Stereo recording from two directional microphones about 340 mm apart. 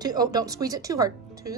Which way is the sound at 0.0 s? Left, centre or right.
Centre.